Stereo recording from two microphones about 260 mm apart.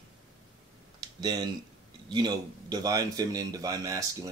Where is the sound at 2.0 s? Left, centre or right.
Centre.